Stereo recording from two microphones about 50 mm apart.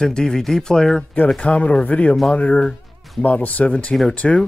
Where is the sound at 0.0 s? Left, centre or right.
Centre.